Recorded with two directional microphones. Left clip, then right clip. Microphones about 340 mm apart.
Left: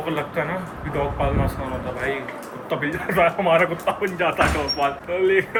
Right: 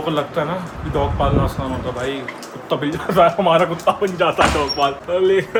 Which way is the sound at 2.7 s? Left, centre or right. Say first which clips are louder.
Right 5 dB; centre.